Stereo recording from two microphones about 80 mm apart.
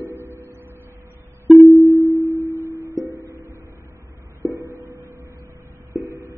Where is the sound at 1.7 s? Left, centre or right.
Left.